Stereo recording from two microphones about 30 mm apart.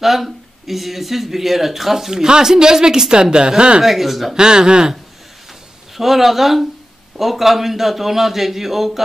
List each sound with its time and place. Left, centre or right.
0.0 s speech: centre
2.2 s a woman's voice: right
3.8 s speech: centre
4.4 s a woman's voice: right
5.9 s speech: centre